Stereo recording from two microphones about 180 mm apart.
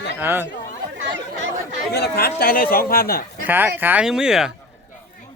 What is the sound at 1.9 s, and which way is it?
Speech, 60° left (ahead or behind).